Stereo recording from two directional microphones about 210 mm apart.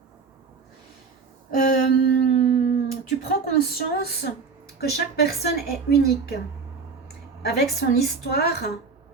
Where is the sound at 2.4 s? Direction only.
35° left (ahead or behind).